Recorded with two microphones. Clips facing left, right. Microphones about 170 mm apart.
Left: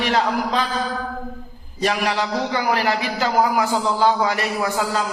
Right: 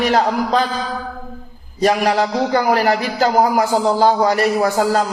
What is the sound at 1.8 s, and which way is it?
A man's voice, 40° right (ahead or behind).